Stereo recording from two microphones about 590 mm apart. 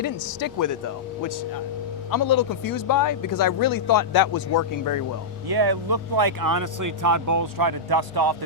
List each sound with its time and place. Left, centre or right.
0.0 s speech: left
5.5 s speech: right